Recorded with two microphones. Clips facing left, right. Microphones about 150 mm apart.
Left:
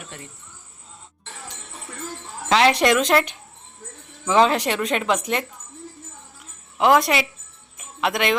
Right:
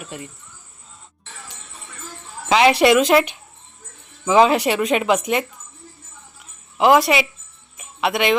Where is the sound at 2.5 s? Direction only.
5° right (ahead or behind).